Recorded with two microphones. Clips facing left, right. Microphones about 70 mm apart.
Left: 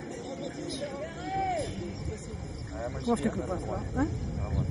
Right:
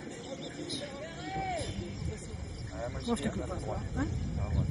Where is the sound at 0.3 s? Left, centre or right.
Centre.